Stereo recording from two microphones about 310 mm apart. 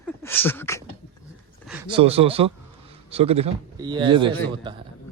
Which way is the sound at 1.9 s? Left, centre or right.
Centre.